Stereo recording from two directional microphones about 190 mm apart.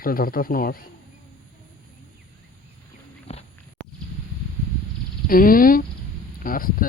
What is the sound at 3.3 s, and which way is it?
Walk, 30° left (ahead or behind).